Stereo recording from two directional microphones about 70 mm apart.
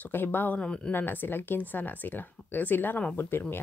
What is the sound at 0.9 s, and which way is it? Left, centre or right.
Speech, left.